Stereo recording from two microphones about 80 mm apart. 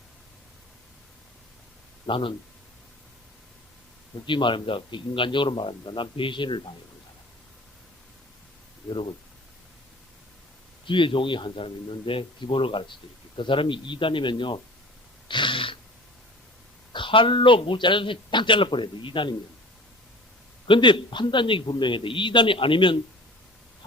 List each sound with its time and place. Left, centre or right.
2.0 s speech: left
4.3 s speech: left
10.8 s speech: left
16.9 s speech: left
20.7 s speech: left